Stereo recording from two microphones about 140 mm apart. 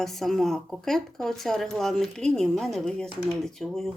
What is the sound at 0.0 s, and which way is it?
Speech, centre (ahead or behind).